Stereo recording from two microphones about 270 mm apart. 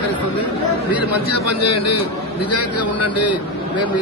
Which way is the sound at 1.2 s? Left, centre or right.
Left.